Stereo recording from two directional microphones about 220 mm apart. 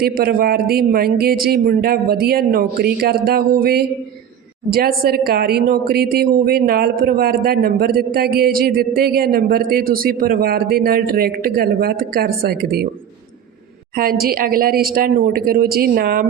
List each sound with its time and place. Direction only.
0.0 s a woman's voice: 45° right (ahead or behind)
13.9 s a woman's voice: 40° right (ahead or behind)